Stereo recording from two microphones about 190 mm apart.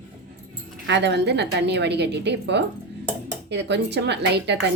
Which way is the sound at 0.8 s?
65° right (ahead or behind).